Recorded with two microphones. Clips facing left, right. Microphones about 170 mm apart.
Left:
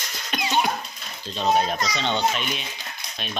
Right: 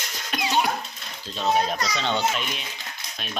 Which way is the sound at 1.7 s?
20° left (ahead or behind).